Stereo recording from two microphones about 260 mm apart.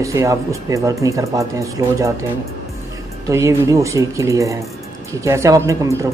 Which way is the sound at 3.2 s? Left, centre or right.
Centre.